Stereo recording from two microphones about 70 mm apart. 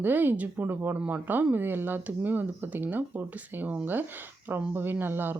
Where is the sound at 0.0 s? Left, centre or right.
Right.